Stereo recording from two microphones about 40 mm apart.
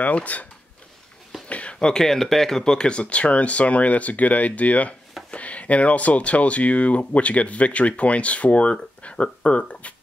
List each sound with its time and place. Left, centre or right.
0.0 s speech: left
1.5 s a sound: left
2.0 s speech: centre; by 9.9 s left